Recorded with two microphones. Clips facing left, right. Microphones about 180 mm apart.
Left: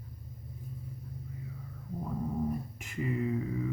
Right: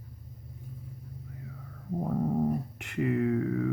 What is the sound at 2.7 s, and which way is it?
Speech, 65° right (ahead or behind).